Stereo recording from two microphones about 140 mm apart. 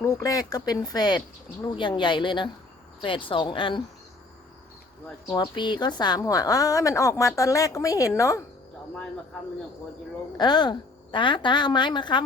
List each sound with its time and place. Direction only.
0.0 s a woman's voice: 25° left (ahead or behind)
5.3 s a woman's voice: 35° left (ahead or behind)
10.3 s a woman's voice: 30° left (ahead or behind)